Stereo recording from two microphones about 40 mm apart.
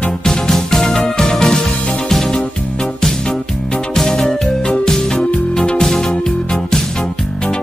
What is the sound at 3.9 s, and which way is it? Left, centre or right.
Music, centre.